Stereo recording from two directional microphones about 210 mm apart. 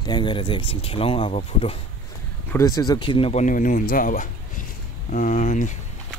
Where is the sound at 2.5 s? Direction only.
15° left (ahead or behind); by 5.8 s 35° left (ahead or behind).